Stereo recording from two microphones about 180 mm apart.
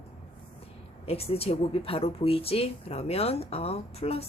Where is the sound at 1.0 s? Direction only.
35° left (ahead or behind).